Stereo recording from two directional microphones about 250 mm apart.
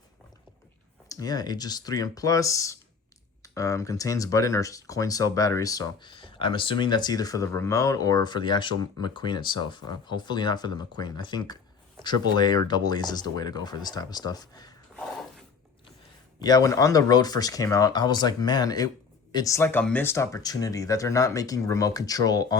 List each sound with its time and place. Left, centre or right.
1.0 s speech: centre
16.4 s speech: centre